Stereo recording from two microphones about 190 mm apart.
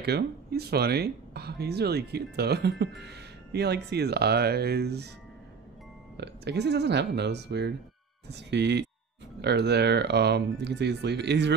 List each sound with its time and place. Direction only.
0.0 s speech: 60° right (ahead or behind)
6.1 s speech: 60° right (ahead or behind)